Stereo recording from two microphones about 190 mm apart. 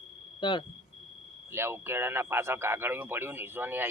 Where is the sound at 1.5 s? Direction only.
15° right (ahead or behind).